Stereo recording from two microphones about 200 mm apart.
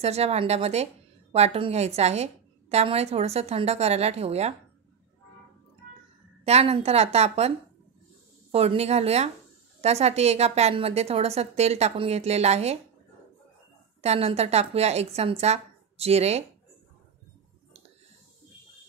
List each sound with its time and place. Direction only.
0.0 s a woman's voice: 30° right (ahead or behind)
6.4 s a woman's voice: 30° right (ahead or behind)
14.0 s a woman's voice: 30° right (ahead or behind)